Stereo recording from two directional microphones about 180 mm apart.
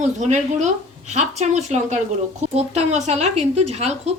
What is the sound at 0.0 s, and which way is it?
A woman's voice, 40° right (ahead or behind).